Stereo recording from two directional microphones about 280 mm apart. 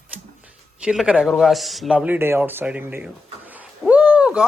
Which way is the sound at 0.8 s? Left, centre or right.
Centre.